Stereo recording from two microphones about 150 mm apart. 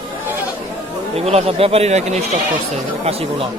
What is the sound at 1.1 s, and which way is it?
Speech, 40° right (ahead or behind).